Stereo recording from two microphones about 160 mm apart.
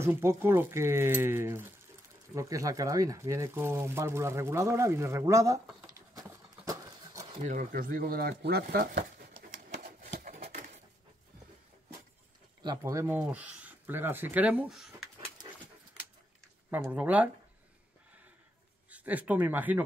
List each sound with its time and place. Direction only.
0.0 s speech: 15° right (ahead or behind)
6.6 s a sound: 20° right (ahead or behind)
7.4 s speech: 60° right (ahead or behind)
9.4 s a sound: 60° right (ahead or behind)
12.6 s speech: 20° right (ahead or behind)
16.8 s speech: 10° right (ahead or behind)
18.9 s speech: 10° right (ahead or behind)